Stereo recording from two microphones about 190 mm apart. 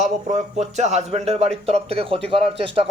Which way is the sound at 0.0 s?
35° right (ahead or behind).